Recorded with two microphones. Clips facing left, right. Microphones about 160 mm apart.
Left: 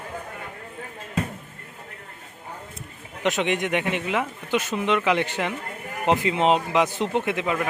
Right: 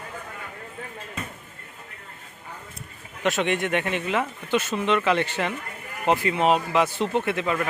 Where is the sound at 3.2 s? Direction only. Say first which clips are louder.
Even; 15° left (ahead or behind).